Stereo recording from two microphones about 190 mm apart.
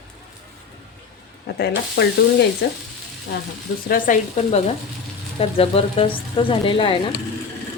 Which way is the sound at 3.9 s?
40° left (ahead or behind).